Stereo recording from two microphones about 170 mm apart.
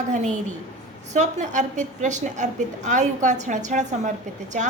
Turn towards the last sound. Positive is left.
turn(degrees=-45)  # may be behind; listen again after turning